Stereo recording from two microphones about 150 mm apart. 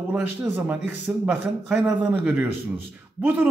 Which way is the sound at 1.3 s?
5° right (ahead or behind).